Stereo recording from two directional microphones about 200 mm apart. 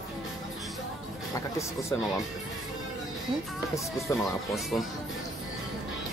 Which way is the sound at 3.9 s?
Centre (ahead or behind).